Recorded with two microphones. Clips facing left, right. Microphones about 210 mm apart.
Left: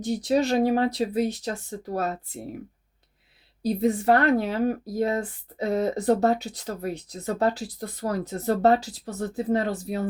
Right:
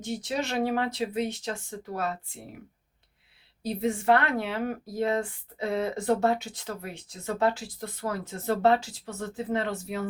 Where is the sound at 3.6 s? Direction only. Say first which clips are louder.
Left 5 dB; 35° left (ahead or behind).